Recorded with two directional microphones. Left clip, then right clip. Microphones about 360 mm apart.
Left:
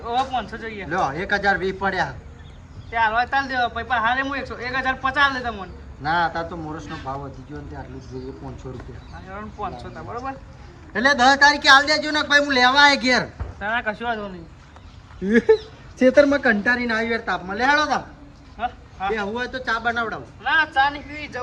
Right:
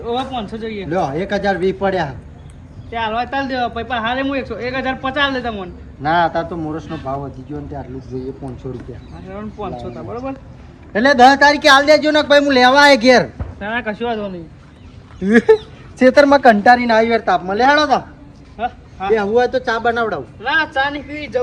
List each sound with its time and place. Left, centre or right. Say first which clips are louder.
0.1 s speech: right 1 dB; left
0.9 s speech: right 3 dB; centre
8.1 s speech: right 8 dB; centre
9.3 s speech: right 4 dB; centre
13.6 s speech: right 3 dB; centre
16.5 s speech: right 10 dB; centre